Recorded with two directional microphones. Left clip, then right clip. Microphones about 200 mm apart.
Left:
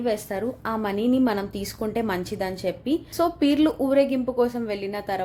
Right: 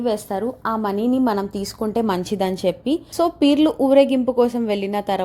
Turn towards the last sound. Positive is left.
turn(degrees=-35)  # may be behind; listen again after turning